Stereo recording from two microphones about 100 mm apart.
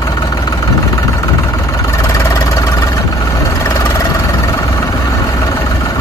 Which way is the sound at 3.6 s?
30° left (ahead or behind).